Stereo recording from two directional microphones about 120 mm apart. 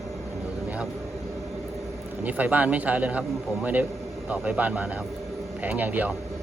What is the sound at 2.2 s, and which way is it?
Speech, 15° right (ahead or behind).